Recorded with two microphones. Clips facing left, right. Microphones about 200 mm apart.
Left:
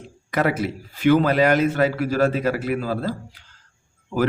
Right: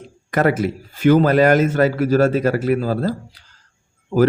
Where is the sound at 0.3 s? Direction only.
45° right (ahead or behind).